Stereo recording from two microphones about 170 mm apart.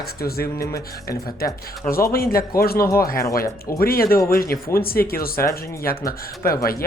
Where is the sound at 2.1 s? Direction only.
60° left (ahead or behind).